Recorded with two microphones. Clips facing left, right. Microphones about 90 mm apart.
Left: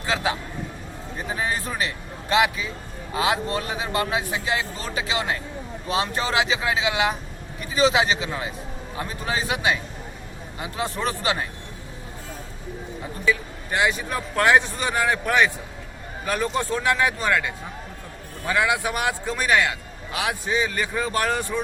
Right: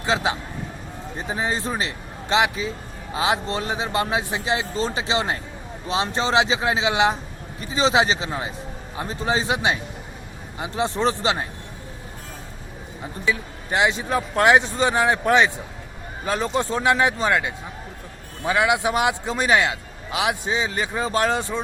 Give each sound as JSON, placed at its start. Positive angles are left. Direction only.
{"t": 0.0, "sound": "a man's voice", "side_deg": -25}
{"t": 1.4, "sound": "a man's voice", "side_deg": -25}
{"t": 13.2, "sound": "a man's voice", "side_deg": -20}